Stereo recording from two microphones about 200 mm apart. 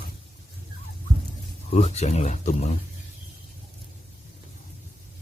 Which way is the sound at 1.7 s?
35° left (ahead or behind).